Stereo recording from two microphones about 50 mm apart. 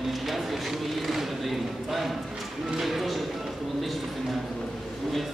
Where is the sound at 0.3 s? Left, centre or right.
Centre.